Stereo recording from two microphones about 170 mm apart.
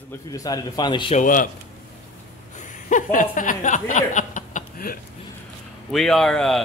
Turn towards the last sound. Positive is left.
turn(degrees=0)  # may be behind; listen again after turning